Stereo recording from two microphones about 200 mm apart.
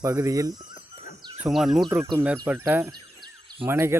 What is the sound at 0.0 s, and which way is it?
Speech, 15° right (ahead or behind).